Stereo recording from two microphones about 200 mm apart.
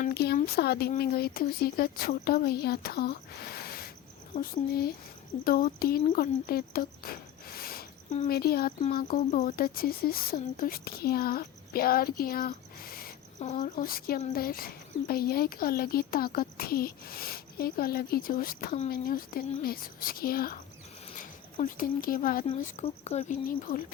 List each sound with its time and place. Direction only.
0.0 s a sound: 55° left (ahead or behind)
0.3 s speech: 50° left (ahead or behind)
13.4 s speech: 35° left (ahead or behind)